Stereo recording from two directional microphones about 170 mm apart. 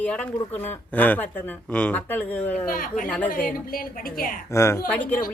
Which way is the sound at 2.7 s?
50° left (ahead or behind).